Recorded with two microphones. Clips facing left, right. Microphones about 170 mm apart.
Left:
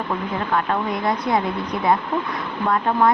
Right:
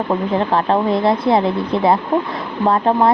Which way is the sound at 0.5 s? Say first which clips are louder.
Right 5 dB; 30° right (ahead or behind).